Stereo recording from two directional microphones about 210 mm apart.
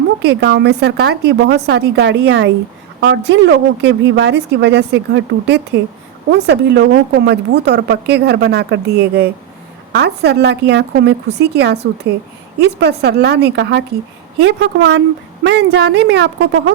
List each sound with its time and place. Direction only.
0.2 s a woman's voice: 55° right (ahead or behind)